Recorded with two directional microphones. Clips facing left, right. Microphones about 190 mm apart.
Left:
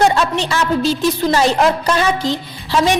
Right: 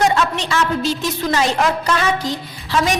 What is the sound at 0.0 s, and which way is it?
A woman's voice, 35° left (ahead or behind).